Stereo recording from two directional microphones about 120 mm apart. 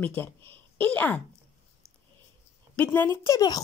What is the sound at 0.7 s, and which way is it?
Speech, 15° left (ahead or behind).